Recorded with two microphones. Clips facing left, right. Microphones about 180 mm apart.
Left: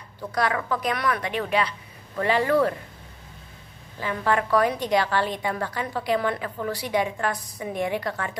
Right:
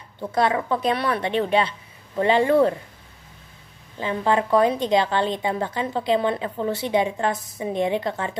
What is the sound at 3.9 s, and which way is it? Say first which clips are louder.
A woman's voice: right 3 dB; 25° right (ahead or behind).